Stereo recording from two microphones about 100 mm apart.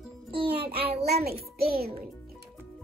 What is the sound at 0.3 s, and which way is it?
A child's voice, 70° right (ahead or behind).